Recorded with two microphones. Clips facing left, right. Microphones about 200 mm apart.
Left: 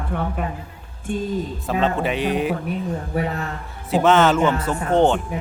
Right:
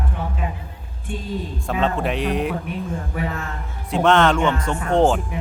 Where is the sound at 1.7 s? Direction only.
Centre (ahead or behind).